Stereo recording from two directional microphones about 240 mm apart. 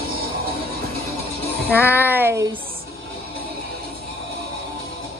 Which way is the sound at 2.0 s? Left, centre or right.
Centre.